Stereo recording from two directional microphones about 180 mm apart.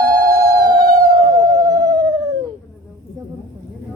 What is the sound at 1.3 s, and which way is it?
Music, 20° right (ahead or behind).